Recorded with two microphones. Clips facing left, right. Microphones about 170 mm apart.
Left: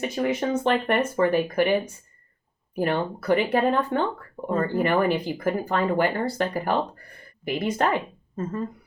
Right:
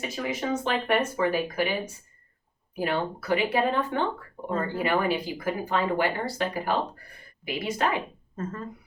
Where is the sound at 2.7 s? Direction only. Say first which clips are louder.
Left 3 dB; 50° left (ahead or behind).